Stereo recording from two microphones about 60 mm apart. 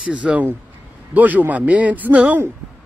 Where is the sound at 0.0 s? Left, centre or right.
Right.